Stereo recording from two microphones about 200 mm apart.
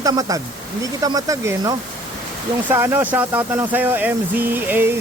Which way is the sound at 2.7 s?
10° right (ahead or behind).